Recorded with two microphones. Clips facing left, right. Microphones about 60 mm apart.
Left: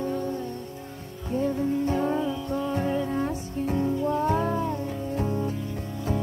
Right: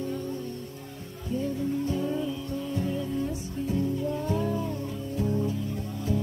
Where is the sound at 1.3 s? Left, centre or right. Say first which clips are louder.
Left 4 dB; left.